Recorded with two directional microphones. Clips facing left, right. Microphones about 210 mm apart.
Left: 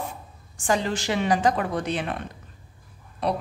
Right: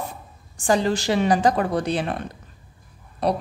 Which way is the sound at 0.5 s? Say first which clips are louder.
Right 4 dB; 35° right (ahead or behind).